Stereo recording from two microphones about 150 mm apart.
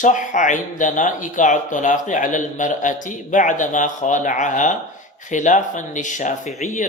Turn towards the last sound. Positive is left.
turn(degrees=55)  # may be behind; listen again after turning